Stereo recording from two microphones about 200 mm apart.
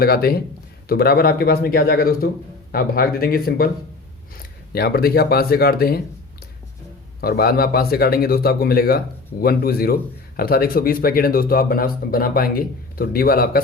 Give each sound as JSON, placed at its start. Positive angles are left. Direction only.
{"t": 0.0, "sound": "a man's voice", "side_deg": 50}
{"t": 4.7, "sound": "a man's voice", "side_deg": 50}
{"t": 7.2, "sound": "a man's voice", "side_deg": 50}